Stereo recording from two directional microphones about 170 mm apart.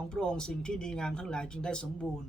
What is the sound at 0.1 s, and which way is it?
Speech, 5° left (ahead or behind).